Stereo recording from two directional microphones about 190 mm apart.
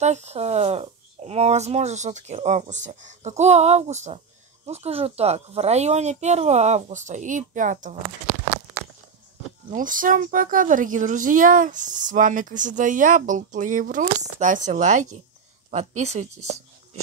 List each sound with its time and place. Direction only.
0.0 s speech: 35° right (ahead or behind)
9.7 s a woman's voice: 45° right (ahead or behind)